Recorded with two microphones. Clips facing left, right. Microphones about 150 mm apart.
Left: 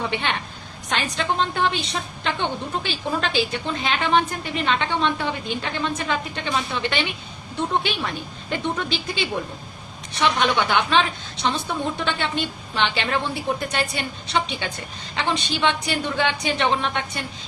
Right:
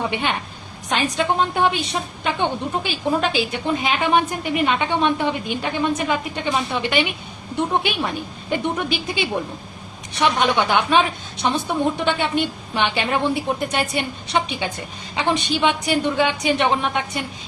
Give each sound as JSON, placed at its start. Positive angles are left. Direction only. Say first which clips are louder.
{"t": 0.9, "sound": "a woman's voice", "louder": "right 4 dB", "side_deg": -15}